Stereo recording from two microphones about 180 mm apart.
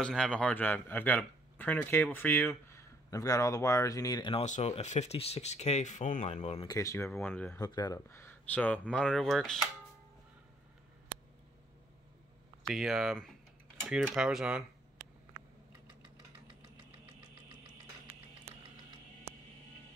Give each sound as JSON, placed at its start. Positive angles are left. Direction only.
{"t": 0.0, "sound": "speech", "side_deg": 5}
{"t": 4.5, "sound": "speech", "side_deg": 40}
{"t": 6.7, "sound": "speech", "side_deg": 15}
{"t": 7.6, "sound": "speech", "side_deg": 20}
{"t": 12.6, "sound": "speech", "side_deg": 0}